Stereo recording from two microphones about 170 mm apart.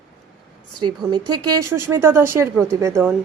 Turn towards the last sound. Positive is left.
turn(degrees=-15)  # may be behind; listen again after turning